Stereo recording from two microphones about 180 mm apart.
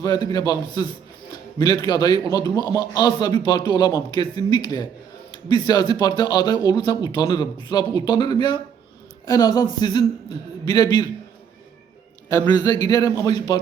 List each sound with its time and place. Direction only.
0.0 s a man's voice: 20° left (ahead or behind)
10.7 s a man's voice: 25° left (ahead or behind)
12.5 s a man's voice: 20° left (ahead or behind)